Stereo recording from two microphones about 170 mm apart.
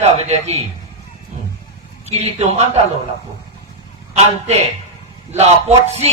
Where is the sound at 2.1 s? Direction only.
40° right (ahead or behind).